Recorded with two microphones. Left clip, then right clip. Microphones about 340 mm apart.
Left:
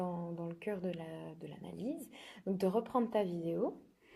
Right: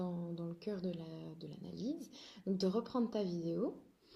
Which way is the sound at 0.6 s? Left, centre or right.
Left.